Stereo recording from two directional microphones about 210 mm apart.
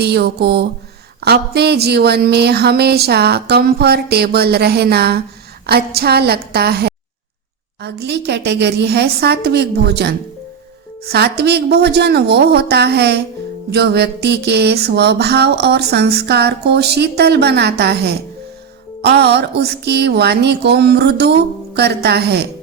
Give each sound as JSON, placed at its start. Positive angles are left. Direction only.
{"t": 0.0, "sound": "music", "side_deg": -50}